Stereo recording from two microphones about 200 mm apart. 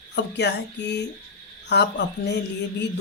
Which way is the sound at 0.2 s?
60° left (ahead or behind).